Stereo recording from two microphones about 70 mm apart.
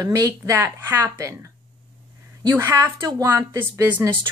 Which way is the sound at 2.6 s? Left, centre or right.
Right.